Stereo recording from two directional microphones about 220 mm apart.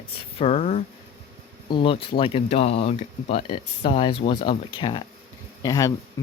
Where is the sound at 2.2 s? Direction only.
25° left (ahead or behind).